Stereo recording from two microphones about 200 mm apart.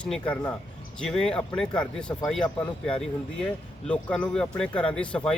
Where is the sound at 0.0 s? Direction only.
5° left (ahead or behind).